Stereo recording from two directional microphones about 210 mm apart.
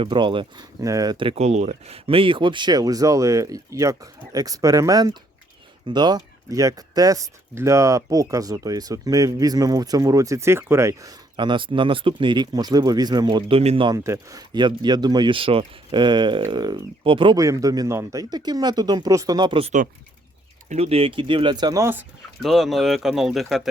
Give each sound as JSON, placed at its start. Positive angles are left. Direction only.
{"t": 0.0, "sound": "speech", "side_deg": -25}
{"t": 22.4, "sound": "speech", "side_deg": 0}